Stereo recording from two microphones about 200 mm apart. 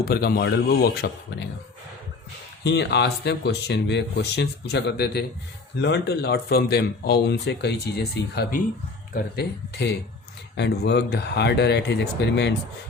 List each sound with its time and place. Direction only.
0.0 s speech: 50° left (ahead or behind)
2.6 s speech: 60° left (ahead or behind)